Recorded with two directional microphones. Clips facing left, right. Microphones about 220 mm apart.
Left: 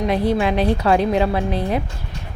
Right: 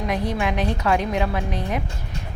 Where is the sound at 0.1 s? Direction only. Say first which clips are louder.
Left 5 dB; 30° left (ahead or behind).